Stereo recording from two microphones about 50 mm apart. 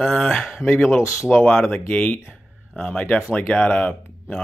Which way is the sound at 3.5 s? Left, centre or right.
Left.